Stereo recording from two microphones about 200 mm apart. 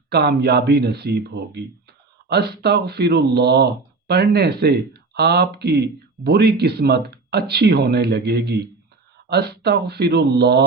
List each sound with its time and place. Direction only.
0.1 s speech: 55° right (ahead or behind)